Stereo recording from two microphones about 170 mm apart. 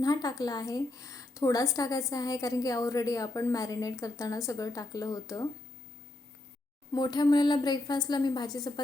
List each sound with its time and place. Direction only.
0.0 s speech: 20° left (ahead or behind)
6.9 s speech: 25° left (ahead or behind)